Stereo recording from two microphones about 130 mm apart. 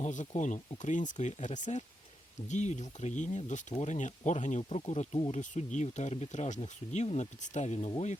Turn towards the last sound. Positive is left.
turn(degrees=60)  # may be behind; listen again after turning